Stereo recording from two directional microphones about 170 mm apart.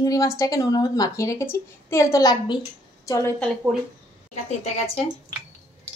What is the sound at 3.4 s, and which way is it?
Speech, 5° left (ahead or behind).